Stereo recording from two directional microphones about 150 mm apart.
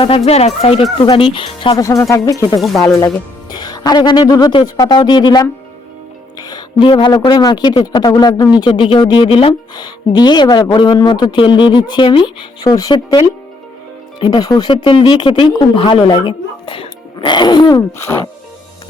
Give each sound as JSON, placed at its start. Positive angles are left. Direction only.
{"t": 0.3, "sound": "speech", "side_deg": 45}
{"t": 1.8, "sound": "speech", "side_deg": 20}
{"t": 2.6, "sound": "speech", "side_deg": 0}
{"t": 3.5, "sound": "speech", "side_deg": 25}
{"t": 17.9, "sound": "speech", "side_deg": 15}